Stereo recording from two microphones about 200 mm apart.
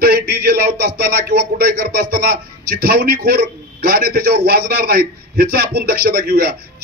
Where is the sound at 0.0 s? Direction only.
50° right (ahead or behind).